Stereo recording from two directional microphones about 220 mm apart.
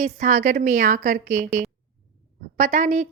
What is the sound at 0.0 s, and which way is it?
A woman's voice, 35° right (ahead or behind).